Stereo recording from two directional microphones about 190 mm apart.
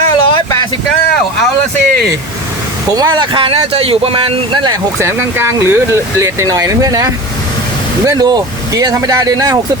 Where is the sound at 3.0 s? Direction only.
25° right (ahead or behind).